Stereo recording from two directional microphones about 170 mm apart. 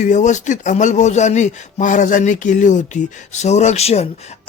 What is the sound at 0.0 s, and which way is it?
A man's voice, 45° left (ahead or behind).